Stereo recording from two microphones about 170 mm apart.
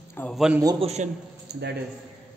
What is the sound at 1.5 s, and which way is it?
Speech, 85° right.